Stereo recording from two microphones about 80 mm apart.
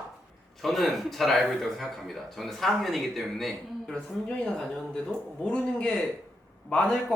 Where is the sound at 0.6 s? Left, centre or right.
Centre.